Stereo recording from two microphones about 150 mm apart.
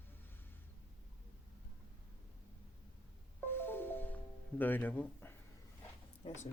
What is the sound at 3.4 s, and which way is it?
Music, 15° left (ahead or behind).